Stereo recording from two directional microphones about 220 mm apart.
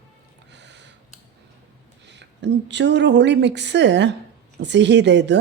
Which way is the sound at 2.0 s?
50° right (ahead or behind).